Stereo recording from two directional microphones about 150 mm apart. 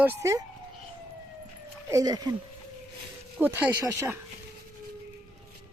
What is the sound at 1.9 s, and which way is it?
Speech, 25° right (ahead or behind).